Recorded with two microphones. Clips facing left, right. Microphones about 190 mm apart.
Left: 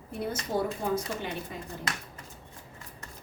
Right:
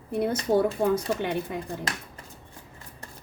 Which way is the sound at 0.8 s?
85° right.